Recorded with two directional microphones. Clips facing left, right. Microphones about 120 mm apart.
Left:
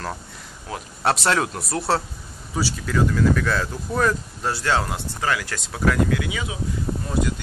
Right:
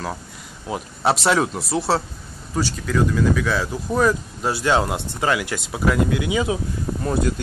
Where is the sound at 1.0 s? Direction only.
Centre (ahead or behind); by 6.4 s 20° right (ahead or behind).